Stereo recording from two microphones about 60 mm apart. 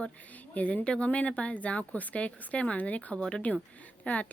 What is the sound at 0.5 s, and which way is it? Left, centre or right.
Speech, left.